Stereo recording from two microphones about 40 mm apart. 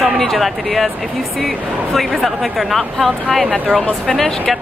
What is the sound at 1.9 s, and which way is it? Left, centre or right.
Speech, centre.